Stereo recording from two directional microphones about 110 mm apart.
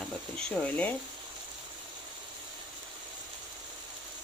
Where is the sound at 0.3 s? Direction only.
5° left (ahead or behind).